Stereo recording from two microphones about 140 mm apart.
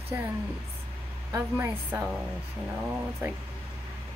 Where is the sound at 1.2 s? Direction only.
20° right (ahead or behind).